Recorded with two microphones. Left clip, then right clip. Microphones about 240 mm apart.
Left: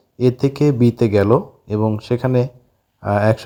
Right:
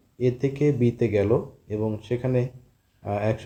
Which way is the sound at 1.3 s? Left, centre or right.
Left.